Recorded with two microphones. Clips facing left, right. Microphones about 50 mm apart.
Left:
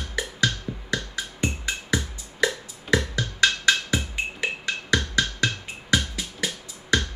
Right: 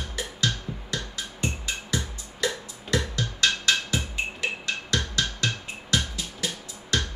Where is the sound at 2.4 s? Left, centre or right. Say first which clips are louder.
Left 4 dB; left.